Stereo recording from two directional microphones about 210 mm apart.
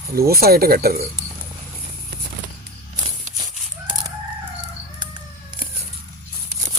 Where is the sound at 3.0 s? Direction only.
25° right (ahead or behind).